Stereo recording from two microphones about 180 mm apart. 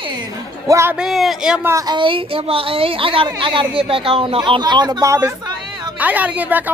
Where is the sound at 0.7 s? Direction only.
15° right (ahead or behind).